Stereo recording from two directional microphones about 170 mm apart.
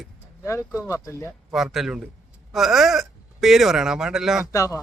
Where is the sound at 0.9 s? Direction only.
15° left (ahead or behind).